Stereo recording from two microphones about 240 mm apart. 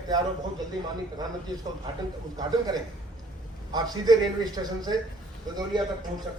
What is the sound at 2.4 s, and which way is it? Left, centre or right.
A man's voice, centre.